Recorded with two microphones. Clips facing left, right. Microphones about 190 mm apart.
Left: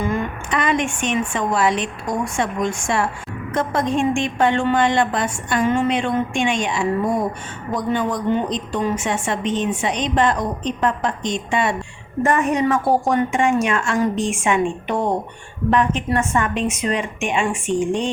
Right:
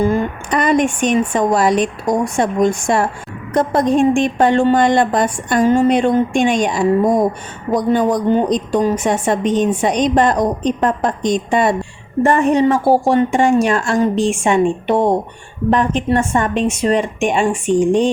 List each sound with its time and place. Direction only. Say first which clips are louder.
0.0 s a woman's voice: right 6 dB; 35° right (ahead or behind)